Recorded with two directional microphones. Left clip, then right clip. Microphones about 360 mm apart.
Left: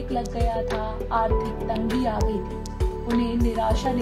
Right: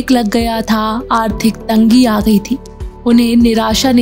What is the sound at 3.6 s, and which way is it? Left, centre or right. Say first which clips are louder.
Speech: right 11 dB; right.